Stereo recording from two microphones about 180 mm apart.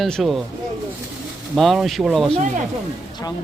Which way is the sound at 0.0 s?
Centre (ahead or behind).